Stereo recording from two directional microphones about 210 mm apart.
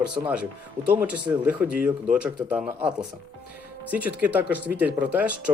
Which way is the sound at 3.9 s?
10° right (ahead or behind).